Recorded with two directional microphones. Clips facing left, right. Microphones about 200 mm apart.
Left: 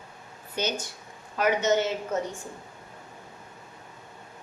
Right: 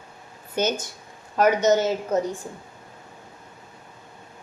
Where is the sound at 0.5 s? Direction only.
45° right (ahead or behind).